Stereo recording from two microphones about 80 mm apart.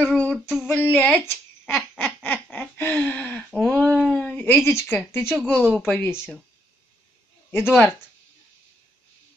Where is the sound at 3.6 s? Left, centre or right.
Centre.